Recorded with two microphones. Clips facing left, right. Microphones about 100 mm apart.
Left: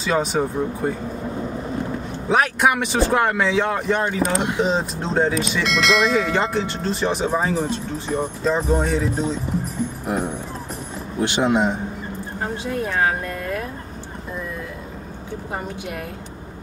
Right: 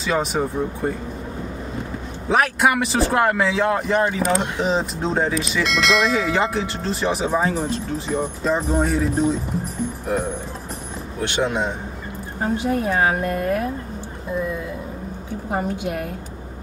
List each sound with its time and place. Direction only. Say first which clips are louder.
0.0 s speech: left 1 dB; centre (ahead or behind)
2.2 s speech: even; centre (ahead or behind)
11.2 s speech: left 3 dB; 15° left (ahead or behind)